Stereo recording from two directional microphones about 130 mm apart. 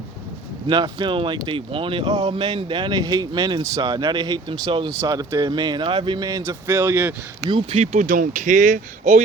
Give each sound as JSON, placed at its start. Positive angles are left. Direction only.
{"t": 0.7, "sound": "speech", "side_deg": -35}
{"t": 7.4, "sound": "speech", "side_deg": -45}
{"t": 7.9, "sound": "speech", "side_deg": -80}